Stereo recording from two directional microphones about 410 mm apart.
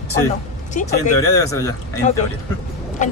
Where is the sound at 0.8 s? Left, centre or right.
Centre.